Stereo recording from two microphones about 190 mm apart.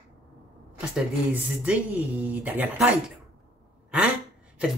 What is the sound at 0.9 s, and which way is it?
Speech, 5° right (ahead or behind).